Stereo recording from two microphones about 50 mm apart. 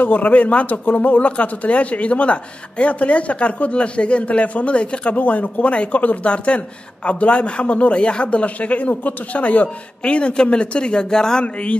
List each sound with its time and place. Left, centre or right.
0.0 s speech: left; by 11.4 s centre